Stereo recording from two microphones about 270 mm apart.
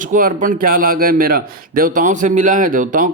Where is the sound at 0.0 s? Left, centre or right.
Right.